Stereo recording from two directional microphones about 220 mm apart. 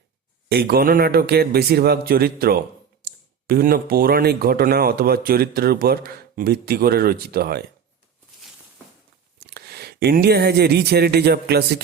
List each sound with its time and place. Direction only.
0.4 s speech: 45° right (ahead or behind)
9.4 s speech: 45° right (ahead or behind)